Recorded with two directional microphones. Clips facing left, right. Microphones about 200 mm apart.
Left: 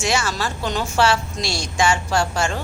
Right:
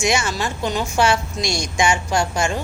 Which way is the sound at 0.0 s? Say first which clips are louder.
Right 2 dB; 15° right (ahead or behind).